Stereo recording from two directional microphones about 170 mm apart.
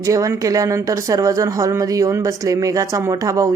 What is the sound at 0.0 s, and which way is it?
Speech, 20° right (ahead or behind).